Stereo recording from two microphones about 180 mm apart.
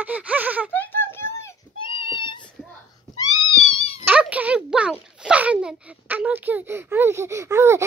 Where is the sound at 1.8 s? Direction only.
30° left (ahead or behind).